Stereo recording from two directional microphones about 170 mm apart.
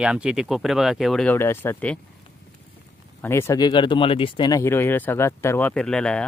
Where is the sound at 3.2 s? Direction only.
15° left (ahead or behind).